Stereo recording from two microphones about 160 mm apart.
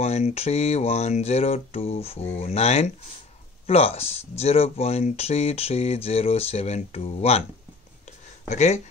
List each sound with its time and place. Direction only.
0.0 s speech: 40° left (ahead or behind)
8.5 s speech: 45° left (ahead or behind)